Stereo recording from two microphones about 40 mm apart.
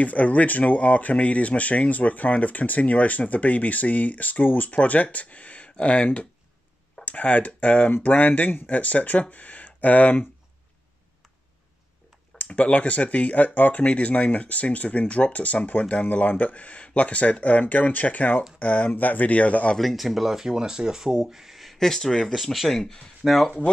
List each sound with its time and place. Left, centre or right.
0.0 s speech: left
12.4 s speech: left
19.8 s speech: centre
21.7 s speech: centre
22.7 s speech: centre
23.2 s speech: centre